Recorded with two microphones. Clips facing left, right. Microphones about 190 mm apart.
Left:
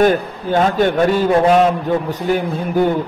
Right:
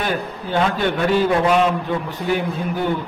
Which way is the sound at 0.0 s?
45° left (ahead or behind).